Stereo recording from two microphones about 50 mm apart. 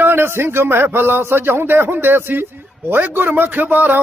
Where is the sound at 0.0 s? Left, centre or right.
Right.